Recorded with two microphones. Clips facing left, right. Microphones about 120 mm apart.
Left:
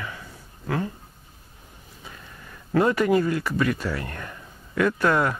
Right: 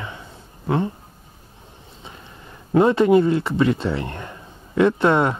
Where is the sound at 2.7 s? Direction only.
25° right (ahead or behind).